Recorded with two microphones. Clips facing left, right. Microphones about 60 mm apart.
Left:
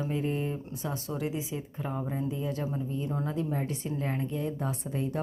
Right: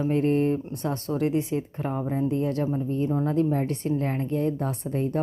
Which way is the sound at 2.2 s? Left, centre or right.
Right.